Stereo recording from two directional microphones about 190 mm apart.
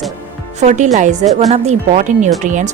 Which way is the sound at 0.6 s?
35° right (ahead or behind).